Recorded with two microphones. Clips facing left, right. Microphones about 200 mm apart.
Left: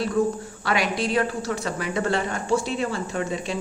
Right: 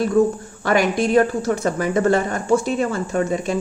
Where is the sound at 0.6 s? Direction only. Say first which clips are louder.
Right 6 dB; 45° right (ahead or behind).